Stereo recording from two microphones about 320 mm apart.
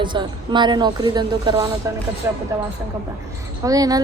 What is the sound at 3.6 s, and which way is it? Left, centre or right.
Speech, centre.